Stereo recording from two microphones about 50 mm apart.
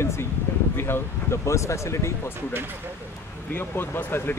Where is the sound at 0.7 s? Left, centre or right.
Left.